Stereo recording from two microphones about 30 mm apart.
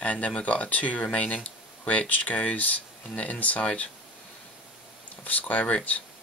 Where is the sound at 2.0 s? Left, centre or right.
Left.